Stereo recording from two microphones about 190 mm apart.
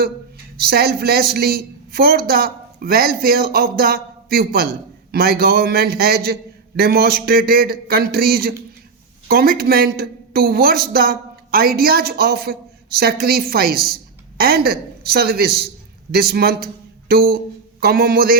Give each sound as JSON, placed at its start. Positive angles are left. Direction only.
{"t": 0.6, "sound": "a man's voice", "side_deg": -55}